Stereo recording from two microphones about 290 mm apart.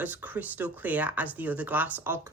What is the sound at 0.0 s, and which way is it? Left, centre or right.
Speech, centre.